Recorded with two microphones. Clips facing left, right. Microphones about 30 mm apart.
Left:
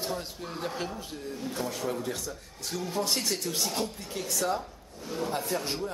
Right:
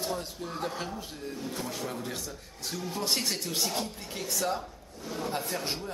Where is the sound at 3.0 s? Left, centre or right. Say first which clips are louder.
Even; centre.